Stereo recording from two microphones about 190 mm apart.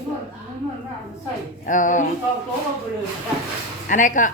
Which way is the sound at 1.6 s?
45° left (ahead or behind).